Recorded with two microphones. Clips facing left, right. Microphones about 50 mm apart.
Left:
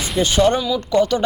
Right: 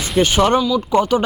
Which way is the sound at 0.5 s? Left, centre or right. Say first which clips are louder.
Right 4 dB; centre.